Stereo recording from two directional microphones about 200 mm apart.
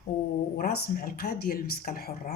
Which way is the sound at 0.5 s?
45° left (ahead or behind).